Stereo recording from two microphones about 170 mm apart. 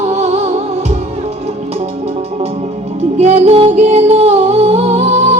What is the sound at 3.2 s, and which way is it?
Music, 40° right (ahead or behind).